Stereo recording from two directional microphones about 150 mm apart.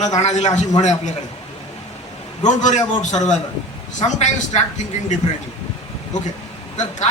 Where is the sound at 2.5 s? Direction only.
55° left (ahead or behind).